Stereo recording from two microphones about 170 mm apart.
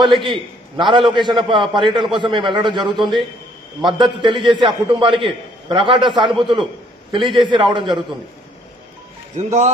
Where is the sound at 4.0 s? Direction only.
30° right (ahead or behind).